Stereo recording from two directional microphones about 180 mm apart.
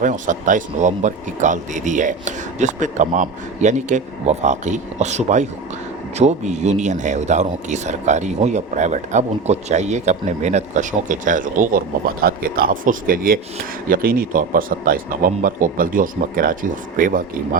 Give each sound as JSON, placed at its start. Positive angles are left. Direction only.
{"t": 0.0, "sound": "speech", "side_deg": -45}